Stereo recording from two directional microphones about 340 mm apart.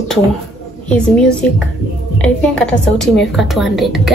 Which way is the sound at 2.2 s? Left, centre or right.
Centre.